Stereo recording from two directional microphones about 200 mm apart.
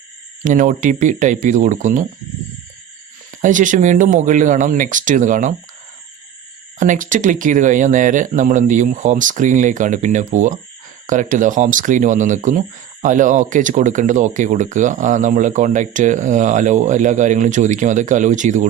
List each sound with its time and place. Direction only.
0.4 s speech: 40° right (ahead or behind)
3.3 s speech: 40° right (ahead or behind)
6.7 s speech: 40° right (ahead or behind)